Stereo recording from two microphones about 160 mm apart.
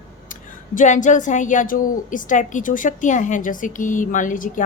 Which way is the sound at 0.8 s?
50° left (ahead or behind).